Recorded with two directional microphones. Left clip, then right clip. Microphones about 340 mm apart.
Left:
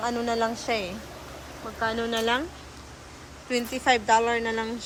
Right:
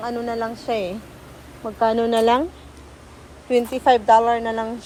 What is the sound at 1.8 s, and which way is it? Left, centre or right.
Speech, centre.